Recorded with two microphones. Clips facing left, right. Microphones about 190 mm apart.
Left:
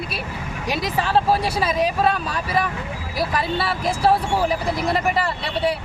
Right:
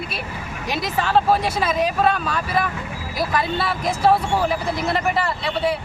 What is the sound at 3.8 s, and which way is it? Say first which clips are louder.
Speech: right 1 dB; 35° left (ahead or behind).